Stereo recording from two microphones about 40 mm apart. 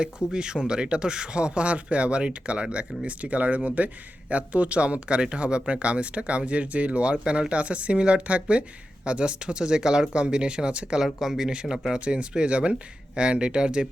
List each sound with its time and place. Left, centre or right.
0.3 s speech: right
11.0 s speech: centre
11.9 s speech: right